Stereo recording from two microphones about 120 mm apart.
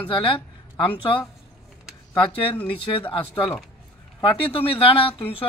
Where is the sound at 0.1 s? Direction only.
45° left (ahead or behind).